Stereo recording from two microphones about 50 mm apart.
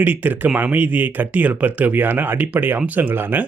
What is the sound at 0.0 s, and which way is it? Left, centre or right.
Speech, right.